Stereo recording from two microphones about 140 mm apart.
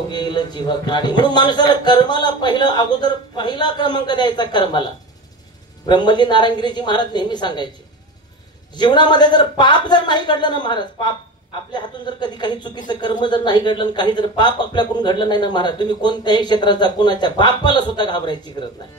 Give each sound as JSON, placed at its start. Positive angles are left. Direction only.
{"t": 0.1, "sound": "speech", "side_deg": 30}
{"t": 5.9, "sound": "speech", "side_deg": 30}
{"t": 8.7, "sound": "speech", "side_deg": 30}